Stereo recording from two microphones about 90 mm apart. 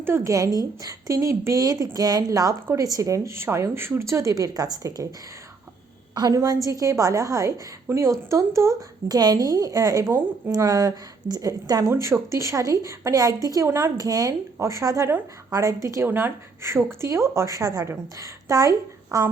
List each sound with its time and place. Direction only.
0.0 s speech: 25° right (ahead or behind)
0.3 s a woman's voice: 40° right (ahead or behind)
6.1 s a woman's voice: 40° right (ahead or behind)
10.1 s speech: 25° right (ahead or behind)
10.5 s a woman's voice: 40° right (ahead or behind)
11.9 s a woman's voice: 35° right (ahead or behind)
13.7 s speech: 30° right (ahead or behind)
13.9 s a woman's voice: 40° right (ahead or behind)
16.0 s a woman's voice: 25° right (ahead or behind)